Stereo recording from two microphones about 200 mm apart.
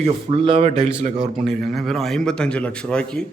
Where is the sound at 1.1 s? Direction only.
Centre (ahead or behind).